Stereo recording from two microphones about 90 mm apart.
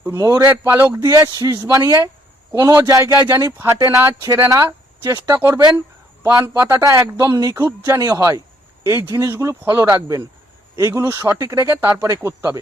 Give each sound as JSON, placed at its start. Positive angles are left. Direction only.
{"t": 0.1, "sound": "a man's voice", "side_deg": -35}
{"t": 0.6, "sound": "a man's voice", "side_deg": -25}